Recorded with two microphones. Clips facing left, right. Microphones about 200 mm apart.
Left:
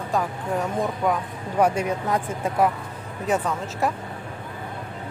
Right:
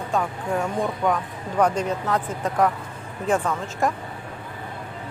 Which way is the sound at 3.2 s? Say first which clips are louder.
Right 1 dB; 5° left (ahead or behind).